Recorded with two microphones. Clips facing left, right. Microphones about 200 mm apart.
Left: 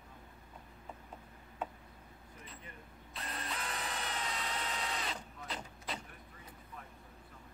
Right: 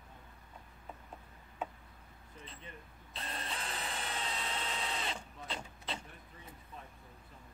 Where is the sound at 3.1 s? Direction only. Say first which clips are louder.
Even; 30° right (ahead or behind).